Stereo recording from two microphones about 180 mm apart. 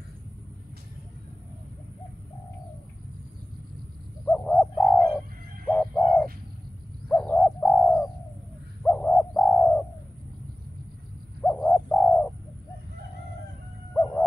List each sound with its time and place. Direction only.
4.3 s bird: 5° left (ahead or behind)
11.4 s bird: 5° left (ahead or behind)
13.9 s dog: 10° left (ahead or behind)